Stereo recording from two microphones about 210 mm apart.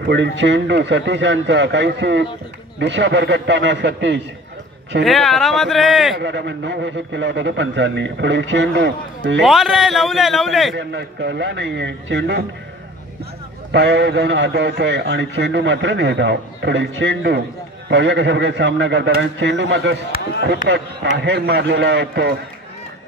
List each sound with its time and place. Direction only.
0.0 s a man's voice: 60° right (ahead or behind)
5.0 s a man's voice: centre (ahead or behind)
6.1 s a man's voice: 55° right (ahead or behind)
9.4 s a man's voice: centre (ahead or behind)
10.7 s a man's voice: 55° right (ahead or behind)
13.7 s a man's voice: 55° right (ahead or behind)